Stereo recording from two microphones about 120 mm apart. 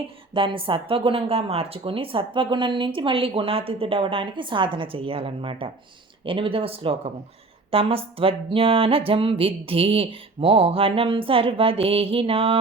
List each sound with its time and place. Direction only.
0.3 s speech: 45° right (ahead or behind)